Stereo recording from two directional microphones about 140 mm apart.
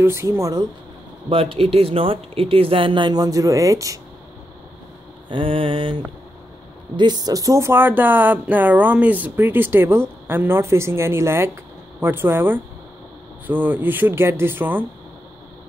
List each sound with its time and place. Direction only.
0.0 s speech: 20° right (ahead or behind)
1.6 s speech: 45° right (ahead or behind); by 4.0 s 25° right (ahead or behind)
5.3 s speech: 40° right (ahead or behind); by 14.9 s 15° right (ahead or behind)